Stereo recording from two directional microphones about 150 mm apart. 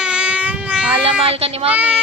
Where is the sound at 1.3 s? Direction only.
40° right (ahead or behind).